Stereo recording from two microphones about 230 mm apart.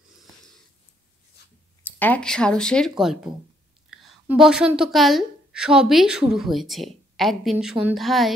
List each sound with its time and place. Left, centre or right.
1.8 s a woman's voice: centre